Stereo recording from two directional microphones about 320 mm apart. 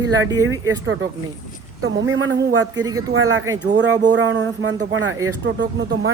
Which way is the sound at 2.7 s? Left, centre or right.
Centre.